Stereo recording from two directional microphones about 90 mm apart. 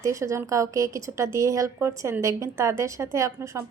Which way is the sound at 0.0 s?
35° right (ahead or behind).